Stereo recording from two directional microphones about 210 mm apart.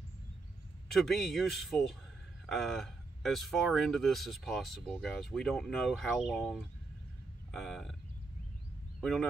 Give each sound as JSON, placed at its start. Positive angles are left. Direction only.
{"t": 0.8, "sound": "speech", "side_deg": 0}
{"t": 9.0, "sound": "speech", "side_deg": 0}